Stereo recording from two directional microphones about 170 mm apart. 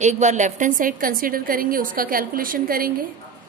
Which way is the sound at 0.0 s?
45° right (ahead or behind).